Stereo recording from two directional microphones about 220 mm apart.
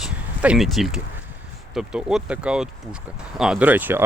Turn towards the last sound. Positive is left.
turn(degrees=-10)  # may be behind; listen again after turning